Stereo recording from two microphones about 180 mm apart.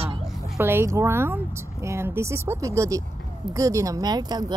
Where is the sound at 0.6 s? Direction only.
15° right (ahead or behind).